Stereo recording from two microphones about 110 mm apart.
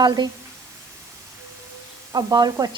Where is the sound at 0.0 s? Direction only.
40° right (ahead or behind).